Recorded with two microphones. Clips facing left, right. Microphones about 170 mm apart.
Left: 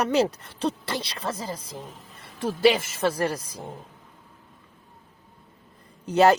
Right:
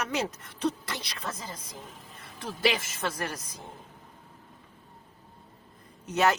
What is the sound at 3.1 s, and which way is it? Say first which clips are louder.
Speech: left 9 dB; 30° left (ahead or behind).